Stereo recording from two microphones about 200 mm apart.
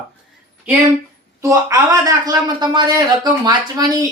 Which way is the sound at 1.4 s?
15° right (ahead or behind).